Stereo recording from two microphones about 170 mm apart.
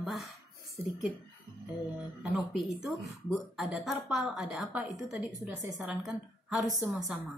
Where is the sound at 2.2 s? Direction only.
5° right (ahead or behind).